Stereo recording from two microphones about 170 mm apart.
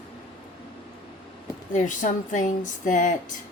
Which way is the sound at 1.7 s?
50° left (ahead or behind).